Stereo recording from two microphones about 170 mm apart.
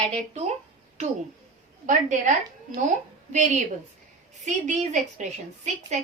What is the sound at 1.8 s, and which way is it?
Speech, 45° right (ahead or behind).